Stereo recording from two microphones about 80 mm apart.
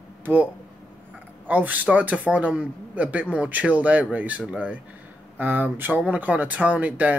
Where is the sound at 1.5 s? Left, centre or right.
Right.